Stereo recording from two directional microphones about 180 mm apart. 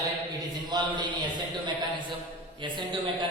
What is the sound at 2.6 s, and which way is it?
Speech, 25° right (ahead or behind).